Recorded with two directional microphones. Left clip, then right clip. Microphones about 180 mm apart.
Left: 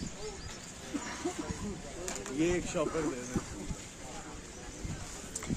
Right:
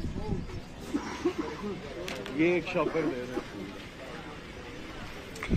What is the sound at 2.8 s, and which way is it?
Speech, 90° left.